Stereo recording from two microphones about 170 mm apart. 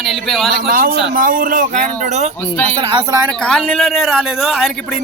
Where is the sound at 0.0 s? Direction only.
Centre (ahead or behind).